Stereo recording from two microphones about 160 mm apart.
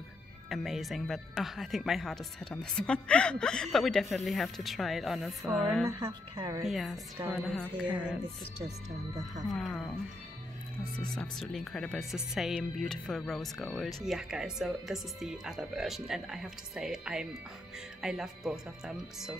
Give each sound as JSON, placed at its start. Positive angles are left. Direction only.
{"t": 0.5, "sound": "speech", "side_deg": 0}
{"t": 6.3, "sound": "a woman's voice", "side_deg": -30}
{"t": 6.6, "sound": "speech", "side_deg": 0}
{"t": 7.7, "sound": "a woman's voice", "side_deg": -5}
{"t": 8.6, "sound": "speech", "side_deg": -50}
{"t": 9.5, "sound": "speech", "side_deg": 0}
{"t": 11.1, "sound": "speech", "side_deg": 0}